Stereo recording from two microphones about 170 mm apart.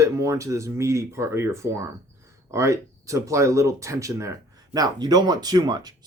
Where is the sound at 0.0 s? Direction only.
20° right (ahead or behind).